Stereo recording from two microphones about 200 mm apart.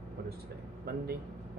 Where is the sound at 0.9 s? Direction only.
50° right (ahead or behind).